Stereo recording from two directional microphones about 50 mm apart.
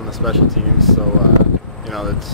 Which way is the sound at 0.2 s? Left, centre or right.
Centre.